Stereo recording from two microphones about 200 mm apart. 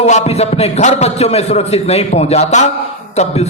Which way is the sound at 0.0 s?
35° left (ahead or behind).